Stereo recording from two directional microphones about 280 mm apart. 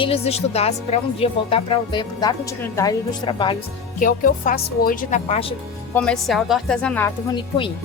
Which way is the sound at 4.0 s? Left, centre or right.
Left.